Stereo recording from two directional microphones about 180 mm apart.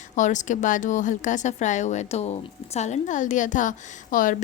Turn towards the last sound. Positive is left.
turn(degrees=50)  # may be behind; listen again after turning